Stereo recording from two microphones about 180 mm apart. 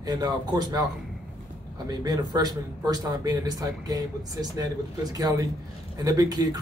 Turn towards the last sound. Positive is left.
turn(degrees=-20)  # may be behind; listen again after turning